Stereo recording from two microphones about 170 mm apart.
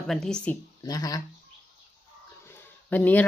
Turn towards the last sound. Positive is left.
turn(degrees=10)  # may be behind; listen again after turning